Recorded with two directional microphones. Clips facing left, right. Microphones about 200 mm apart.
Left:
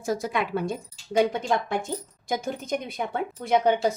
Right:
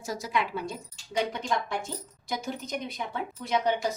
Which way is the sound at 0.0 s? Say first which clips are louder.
Left 4 dB; 55° left (ahead or behind).